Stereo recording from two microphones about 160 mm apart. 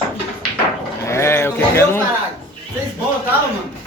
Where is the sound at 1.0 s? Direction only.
15° left (ahead or behind).